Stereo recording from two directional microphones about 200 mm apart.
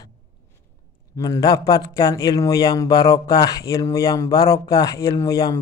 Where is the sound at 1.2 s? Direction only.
20° left (ahead or behind).